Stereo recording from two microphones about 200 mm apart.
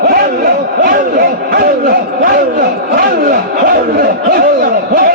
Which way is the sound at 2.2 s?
45° right (ahead or behind).